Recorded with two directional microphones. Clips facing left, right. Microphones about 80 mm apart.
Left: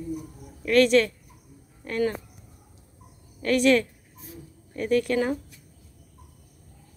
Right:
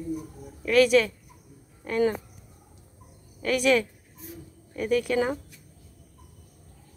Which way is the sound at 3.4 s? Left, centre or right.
Centre.